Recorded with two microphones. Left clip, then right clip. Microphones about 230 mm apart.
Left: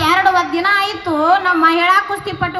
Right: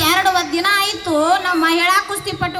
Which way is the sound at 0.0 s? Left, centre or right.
Right.